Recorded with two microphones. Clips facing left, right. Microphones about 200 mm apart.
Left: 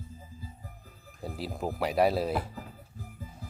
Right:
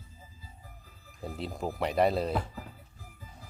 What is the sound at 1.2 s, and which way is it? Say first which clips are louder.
Speech: left 1 dB; 5° left (ahead or behind).